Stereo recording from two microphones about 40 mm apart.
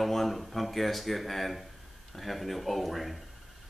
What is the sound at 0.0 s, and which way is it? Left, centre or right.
Speech, centre.